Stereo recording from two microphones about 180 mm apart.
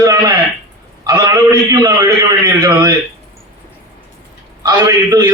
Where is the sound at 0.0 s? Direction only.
20° right (ahead or behind).